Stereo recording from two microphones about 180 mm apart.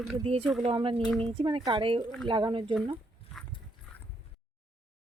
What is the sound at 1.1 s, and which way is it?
Speech, 5° left (ahead or behind).